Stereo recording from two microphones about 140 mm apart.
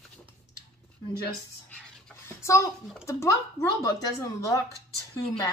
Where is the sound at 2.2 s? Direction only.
20° left (ahead or behind).